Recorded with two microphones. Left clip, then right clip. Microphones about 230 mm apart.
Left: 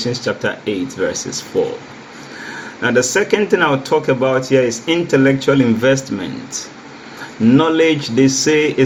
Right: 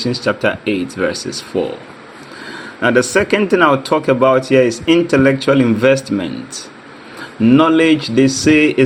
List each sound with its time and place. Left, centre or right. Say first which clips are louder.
0.0 s speech: right 3 dB; right
2.8 s speech: right 2 dB; right